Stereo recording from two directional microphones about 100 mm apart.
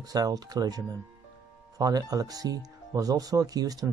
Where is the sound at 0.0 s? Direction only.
40° right (ahead or behind).